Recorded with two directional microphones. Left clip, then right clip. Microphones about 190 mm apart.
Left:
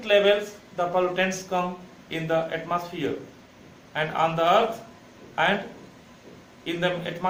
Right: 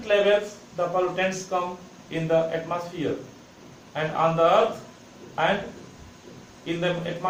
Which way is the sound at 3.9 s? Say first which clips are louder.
Right 1 dB; 20° left (ahead or behind).